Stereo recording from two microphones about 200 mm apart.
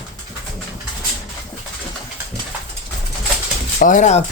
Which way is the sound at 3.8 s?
40° left (ahead or behind).